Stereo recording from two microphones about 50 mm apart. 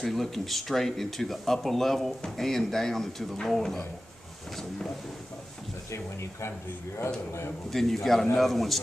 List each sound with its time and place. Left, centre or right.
0.0 s speech: centre
5.9 s speech: left
7.7 s speech: centre